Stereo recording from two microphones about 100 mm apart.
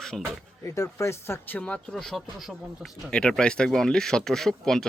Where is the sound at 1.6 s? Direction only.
10° left (ahead or behind).